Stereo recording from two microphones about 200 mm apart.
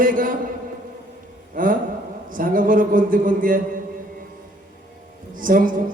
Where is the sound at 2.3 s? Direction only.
45° right (ahead or behind).